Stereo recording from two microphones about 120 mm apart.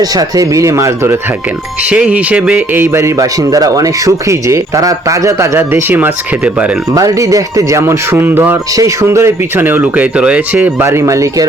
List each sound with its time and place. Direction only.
0.0 s speech: 30° right (ahead or behind)
1.9 s speech: 10° right (ahead or behind)
2.7 s speech: 20° right (ahead or behind)
6.9 s speech: 30° right (ahead or behind)
8.7 s speech: 25° right (ahead or behind)
10.8 s speech: 25° right (ahead or behind)